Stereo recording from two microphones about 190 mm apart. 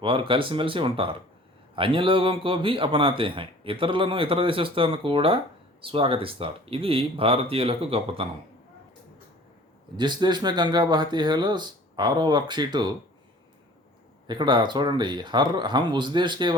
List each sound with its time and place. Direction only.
0.0 s a man's voice: 25° right (ahead or behind)
10.0 s a man's voice: 25° right (ahead or behind)
14.3 s a man's voice: 25° right (ahead or behind)